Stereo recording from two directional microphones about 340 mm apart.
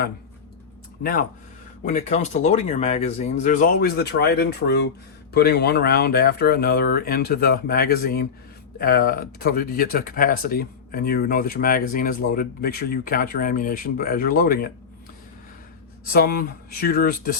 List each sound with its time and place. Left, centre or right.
1.8 s speech: left
16.1 s speech: left